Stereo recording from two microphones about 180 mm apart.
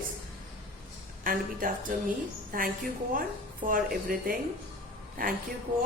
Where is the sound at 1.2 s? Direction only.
50° right (ahead or behind).